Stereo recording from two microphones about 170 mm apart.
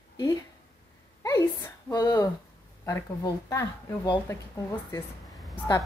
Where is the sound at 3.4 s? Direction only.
20° left (ahead or behind).